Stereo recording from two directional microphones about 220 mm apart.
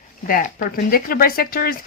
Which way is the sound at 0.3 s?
40° left (ahead or behind).